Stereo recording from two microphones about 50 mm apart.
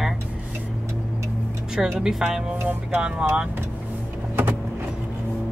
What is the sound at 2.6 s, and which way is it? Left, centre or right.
Speech, right.